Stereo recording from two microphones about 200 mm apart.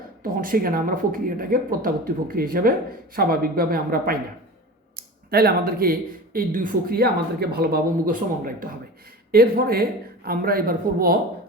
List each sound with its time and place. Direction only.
0.2 s speech: 45° right (ahead or behind)
5.3 s speech: 50° right (ahead or behind)